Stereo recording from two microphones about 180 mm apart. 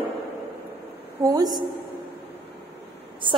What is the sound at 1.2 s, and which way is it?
Speech, 20° right (ahead or behind).